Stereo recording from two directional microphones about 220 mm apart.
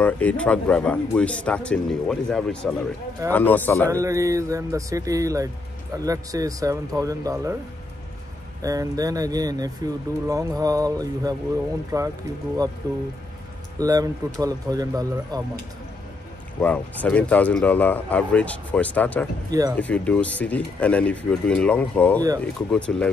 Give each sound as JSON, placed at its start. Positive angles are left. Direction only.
{"t": 0.0, "sound": "speech", "side_deg": 5}
{"t": 3.9, "sound": "speech", "side_deg": -15}
{"t": 8.6, "sound": "speech", "side_deg": -15}
{"t": 16.6, "sound": "speech", "side_deg": 5}